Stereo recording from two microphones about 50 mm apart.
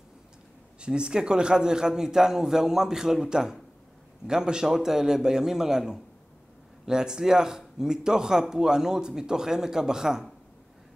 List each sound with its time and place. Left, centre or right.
0.7 s speech: centre